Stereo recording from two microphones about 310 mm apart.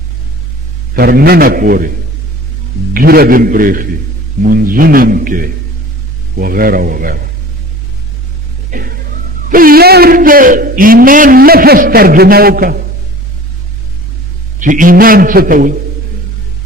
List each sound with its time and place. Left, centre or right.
0.9 s a man's voice: right
2.9 s a man's voice: right
8.7 s a sound: right
9.5 s a man's voice: right
14.6 s a man's voice: right